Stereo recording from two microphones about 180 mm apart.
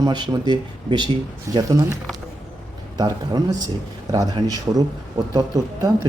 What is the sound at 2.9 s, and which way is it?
A man's voice, 20° right (ahead or behind).